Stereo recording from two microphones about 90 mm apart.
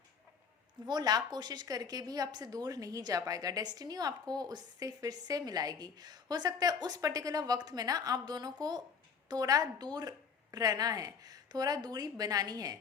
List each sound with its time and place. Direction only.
0.9 s a woman's voice: 50° right (ahead or behind)